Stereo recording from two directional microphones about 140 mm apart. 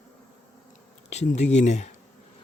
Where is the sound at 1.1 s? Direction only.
55° left (ahead or behind).